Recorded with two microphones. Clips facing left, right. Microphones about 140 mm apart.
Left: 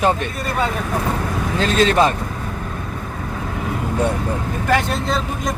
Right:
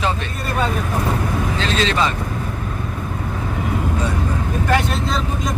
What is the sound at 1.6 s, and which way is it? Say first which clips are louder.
Speech: left 6 dB; 50° left (ahead or behind).